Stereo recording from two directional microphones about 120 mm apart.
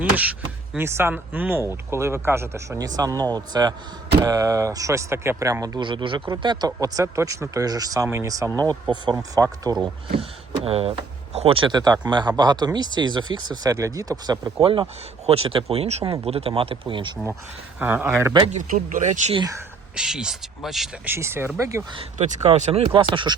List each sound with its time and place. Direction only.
0.0 s speech: 10° right (ahead or behind); by 5.9 s 30° right (ahead or behind)
5.9 s speech: 45° right (ahead or behind)
10.2 s speech: 55° right (ahead or behind); by 14.5 s 30° right (ahead or behind)
14.6 s speech: 50° right (ahead or behind)
17.7 s speech: 15° right (ahead or behind)
18.5 s speech: 90° right
20.0 s speech: 5° right (ahead or behind)
21.0 s speech: 20° right (ahead or behind)
22.2 s speech: 70° right (ahead or behind)
22.9 s speech: 45° right (ahead or behind)